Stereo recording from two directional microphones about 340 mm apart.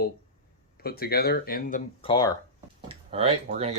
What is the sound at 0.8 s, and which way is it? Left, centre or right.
Speech, left.